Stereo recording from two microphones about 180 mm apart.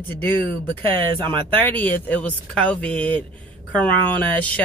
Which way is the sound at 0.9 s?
25° right (ahead or behind).